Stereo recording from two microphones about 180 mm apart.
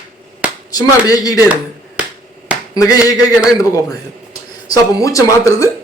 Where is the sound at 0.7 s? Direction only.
20° left (ahead or behind).